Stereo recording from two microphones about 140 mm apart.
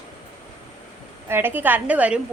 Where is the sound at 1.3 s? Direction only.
15° right (ahead or behind).